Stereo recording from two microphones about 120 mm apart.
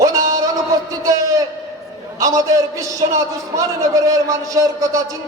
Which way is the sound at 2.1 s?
30° right (ahead or behind).